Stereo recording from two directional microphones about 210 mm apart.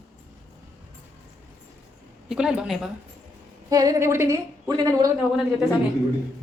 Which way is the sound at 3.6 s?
15° right (ahead or behind).